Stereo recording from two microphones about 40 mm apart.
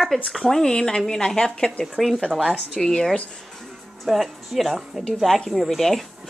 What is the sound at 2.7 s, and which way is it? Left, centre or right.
Speech, left.